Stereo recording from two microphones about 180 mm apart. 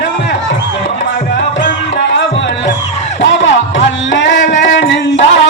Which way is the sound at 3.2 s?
90° left.